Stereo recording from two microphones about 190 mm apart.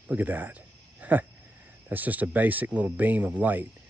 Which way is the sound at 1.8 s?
10° right (ahead or behind).